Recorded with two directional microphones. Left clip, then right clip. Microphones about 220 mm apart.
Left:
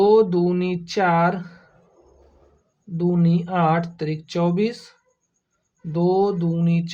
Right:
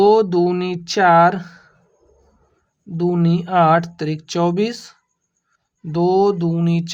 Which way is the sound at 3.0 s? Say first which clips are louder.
Right 3 dB; 45° right (ahead or behind).